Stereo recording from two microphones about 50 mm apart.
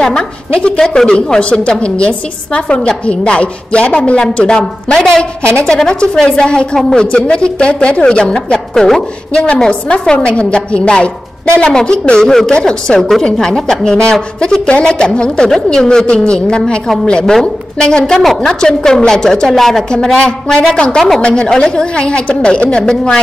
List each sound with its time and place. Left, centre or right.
0.0 s a woman's voice: centre
17.3 s a woman's voice: centre
18.2 s a woman's voice: centre
18.5 s a woman's voice: centre